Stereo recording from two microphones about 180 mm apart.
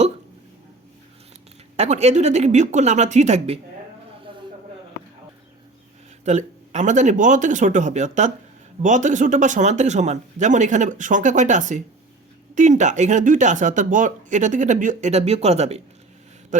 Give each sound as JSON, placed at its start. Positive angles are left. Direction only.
{"t": 1.7, "sound": "speech", "side_deg": -35}
{"t": 4.3, "sound": "a sound", "side_deg": -30}
{"t": 6.2, "sound": "speech", "side_deg": -40}